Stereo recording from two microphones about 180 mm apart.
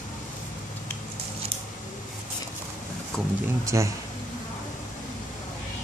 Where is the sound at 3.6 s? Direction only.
15° right (ahead or behind).